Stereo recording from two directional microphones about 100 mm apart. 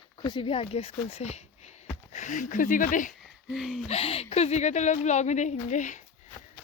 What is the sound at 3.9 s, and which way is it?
Speech, 80° left.